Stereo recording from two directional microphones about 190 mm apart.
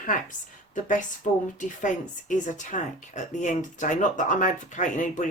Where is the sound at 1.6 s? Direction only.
40° left (ahead or behind).